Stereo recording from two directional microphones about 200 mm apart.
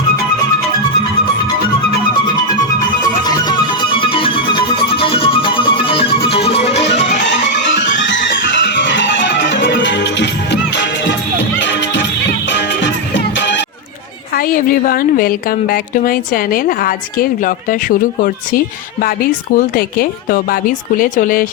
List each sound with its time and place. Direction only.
3.2 s music: 20° left (ahead or behind)
6.8 s music: 60° left (ahead or behind)
14.3 s a woman's voice: 45° left (ahead or behind)